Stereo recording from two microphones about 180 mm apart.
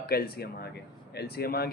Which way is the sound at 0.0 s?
60° left (ahead or behind).